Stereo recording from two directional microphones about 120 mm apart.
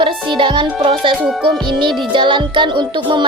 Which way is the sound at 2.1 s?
45° right (ahead or behind).